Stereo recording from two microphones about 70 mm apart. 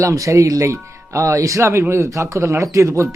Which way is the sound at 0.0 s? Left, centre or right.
Right.